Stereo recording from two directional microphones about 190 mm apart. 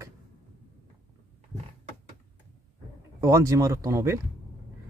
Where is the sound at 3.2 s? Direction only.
15° right (ahead or behind).